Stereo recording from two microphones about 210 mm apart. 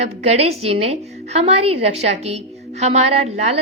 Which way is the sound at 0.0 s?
30° right (ahead or behind).